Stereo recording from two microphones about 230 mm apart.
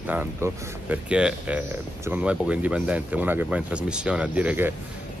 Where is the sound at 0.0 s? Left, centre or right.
Centre.